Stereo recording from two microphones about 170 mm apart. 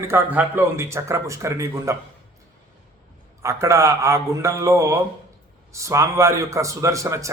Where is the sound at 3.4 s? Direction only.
15° right (ahead or behind).